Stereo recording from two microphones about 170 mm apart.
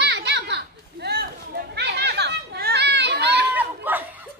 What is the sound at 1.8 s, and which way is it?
Chatter, 80° right.